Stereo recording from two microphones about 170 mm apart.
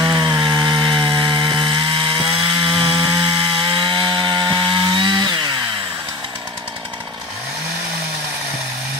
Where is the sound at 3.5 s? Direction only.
30° right (ahead or behind).